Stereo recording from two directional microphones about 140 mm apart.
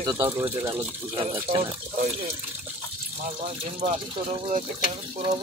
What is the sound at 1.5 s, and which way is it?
Speech, 45° right (ahead or behind).